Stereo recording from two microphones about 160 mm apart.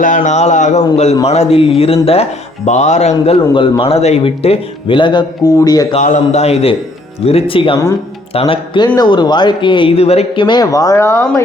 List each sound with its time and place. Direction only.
0.0 s a man's voice: 50° left (ahead or behind)
2.6 s speech: 45° left (ahead or behind)
3.5 s a man's voice: 35° left (ahead or behind)
6.0 s a man's voice: 50° left (ahead or behind); by 11.4 s 15° left (ahead or behind)